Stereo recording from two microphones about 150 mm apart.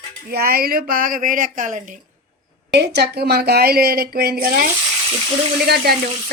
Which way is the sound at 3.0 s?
90° right.